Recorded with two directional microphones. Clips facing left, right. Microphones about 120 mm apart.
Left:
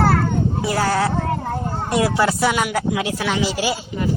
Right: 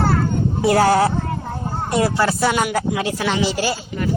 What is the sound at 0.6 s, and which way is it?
Speech, 55° right (ahead or behind).